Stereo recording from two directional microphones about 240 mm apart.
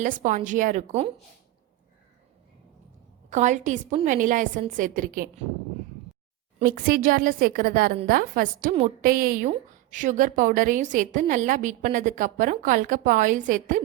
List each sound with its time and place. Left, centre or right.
0.0 s a woman's voice: right
3.2 s a woman's voice: right
6.6 s a woman's voice: right